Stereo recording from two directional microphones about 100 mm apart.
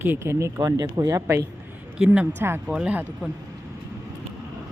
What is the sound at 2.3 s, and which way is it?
Speech, 25° right (ahead or behind).